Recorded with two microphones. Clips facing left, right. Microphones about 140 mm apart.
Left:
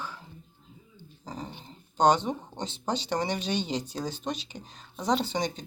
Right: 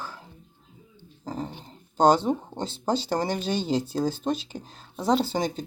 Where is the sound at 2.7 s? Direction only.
45° right (ahead or behind).